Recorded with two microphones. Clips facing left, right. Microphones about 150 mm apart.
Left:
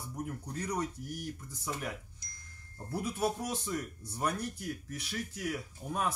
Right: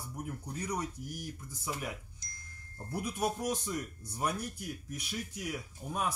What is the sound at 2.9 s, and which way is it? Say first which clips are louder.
Speech: left 1 dB; 15° right (ahead or behind).